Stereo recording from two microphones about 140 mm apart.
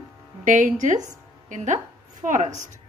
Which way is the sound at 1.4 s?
60° right (ahead or behind).